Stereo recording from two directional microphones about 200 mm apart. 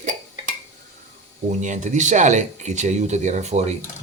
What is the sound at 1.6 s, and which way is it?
Speech, 35° right (ahead or behind).